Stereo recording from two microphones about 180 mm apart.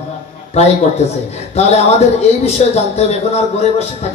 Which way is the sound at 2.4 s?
35° left (ahead or behind).